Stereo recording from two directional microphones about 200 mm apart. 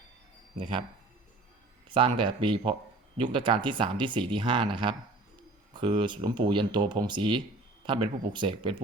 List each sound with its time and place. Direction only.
1.9 s speech: 25° right (ahead or behind)